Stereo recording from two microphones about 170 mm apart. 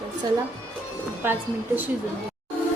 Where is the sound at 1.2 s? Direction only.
10° right (ahead or behind).